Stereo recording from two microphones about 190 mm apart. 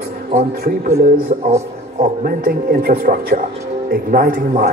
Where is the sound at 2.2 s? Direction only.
50° right (ahead or behind).